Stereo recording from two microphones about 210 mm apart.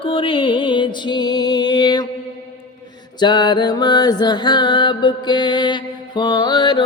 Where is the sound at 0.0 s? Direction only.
25° left (ahead or behind).